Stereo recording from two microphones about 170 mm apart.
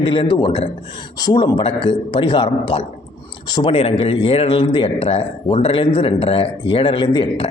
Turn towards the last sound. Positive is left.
turn(degrees=30)  # may be behind; listen again after turning